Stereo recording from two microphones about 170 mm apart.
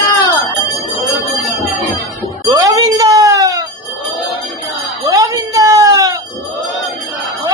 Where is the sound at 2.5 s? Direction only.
20° right (ahead or behind).